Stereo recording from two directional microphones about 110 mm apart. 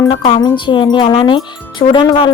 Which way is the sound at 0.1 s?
55° left (ahead or behind).